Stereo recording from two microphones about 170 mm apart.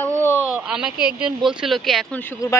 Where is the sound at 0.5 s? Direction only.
5° right (ahead or behind).